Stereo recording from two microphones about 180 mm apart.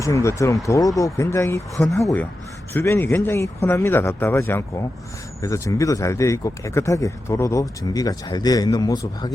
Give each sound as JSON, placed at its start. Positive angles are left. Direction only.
{"t": 0.0, "sound": "speech", "side_deg": 15}
{"t": 1.7, "sound": "speech", "side_deg": 0}
{"t": 2.0, "sound": "speech", "side_deg": 15}